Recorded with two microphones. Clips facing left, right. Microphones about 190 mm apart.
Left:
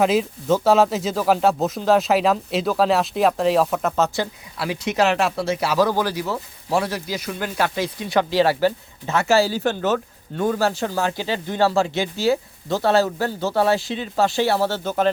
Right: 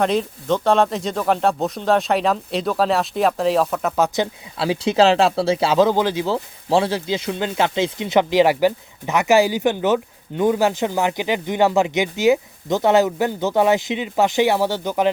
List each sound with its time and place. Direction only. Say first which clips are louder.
0.0 s speech: left 1 dB; 5° left (ahead or behind)
3.9 s speech: right 2 dB; 15° right (ahead or behind)